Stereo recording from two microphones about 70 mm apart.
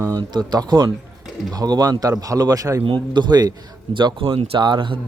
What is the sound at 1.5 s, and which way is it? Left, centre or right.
Speech, right.